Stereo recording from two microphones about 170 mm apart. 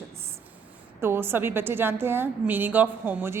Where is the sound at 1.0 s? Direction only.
15° right (ahead or behind).